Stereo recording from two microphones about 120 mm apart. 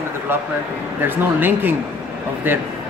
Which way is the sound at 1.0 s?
15° right (ahead or behind).